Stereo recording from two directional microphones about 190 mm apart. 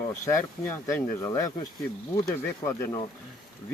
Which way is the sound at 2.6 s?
15° left (ahead or behind).